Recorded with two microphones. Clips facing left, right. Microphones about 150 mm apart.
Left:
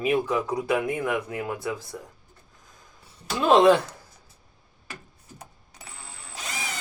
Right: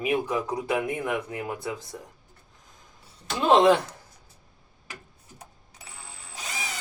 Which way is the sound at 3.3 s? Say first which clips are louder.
Left 1 dB; 15° right (ahead or behind).